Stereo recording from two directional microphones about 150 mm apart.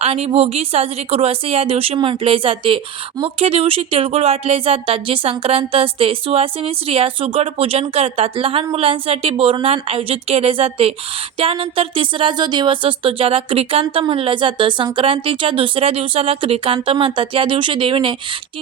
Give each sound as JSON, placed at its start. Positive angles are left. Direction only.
{"t": 0.0, "sound": "speech", "side_deg": -40}